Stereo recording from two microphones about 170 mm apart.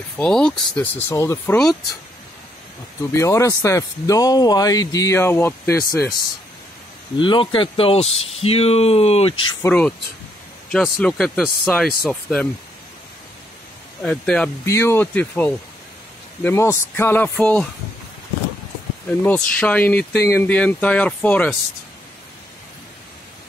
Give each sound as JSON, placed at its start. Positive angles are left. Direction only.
{"t": 0.2, "sound": "speech", "side_deg": 5}
{"t": 3.2, "sound": "speech", "side_deg": 20}
{"t": 5.9, "sound": "speech", "side_deg": 60}
{"t": 7.2, "sound": "speech", "side_deg": 30}
{"t": 9.6, "sound": "speech", "side_deg": 10}
{"t": 14.0, "sound": "speech", "side_deg": 5}
{"t": 19.2, "sound": "speech", "side_deg": 10}
{"t": 20.0, "sound": "speech", "side_deg": 75}
{"t": 20.2, "sound": "speech", "side_deg": 10}